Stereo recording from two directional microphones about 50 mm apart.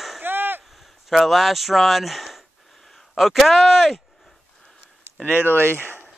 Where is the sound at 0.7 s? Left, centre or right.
Centre.